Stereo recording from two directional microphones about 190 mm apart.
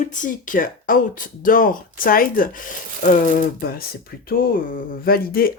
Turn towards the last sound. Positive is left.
turn(degrees=50)  # may be behind; listen again after turning